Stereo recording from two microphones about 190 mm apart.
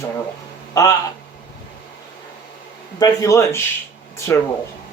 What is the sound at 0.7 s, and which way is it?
Speech, 20° left (ahead or behind).